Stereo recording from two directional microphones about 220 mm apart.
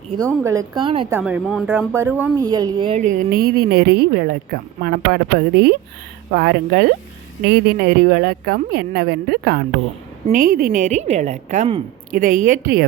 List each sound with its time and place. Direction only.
0.3 s a woman's voice: 15° right (ahead or behind)
1.1 s speech: 5° right (ahead or behind)
2.5 s a woman's voice: 20° right (ahead or behind)
3.0 s a woman's voice: 40° right (ahead or behind)